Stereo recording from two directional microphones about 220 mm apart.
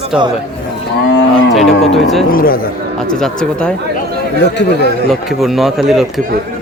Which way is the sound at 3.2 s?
5° left (ahead or behind).